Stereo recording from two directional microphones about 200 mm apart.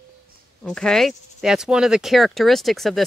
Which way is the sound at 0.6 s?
Centre (ahead or behind).